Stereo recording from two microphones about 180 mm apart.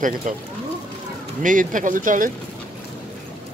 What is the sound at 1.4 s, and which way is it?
Speech, 45° right (ahead or behind).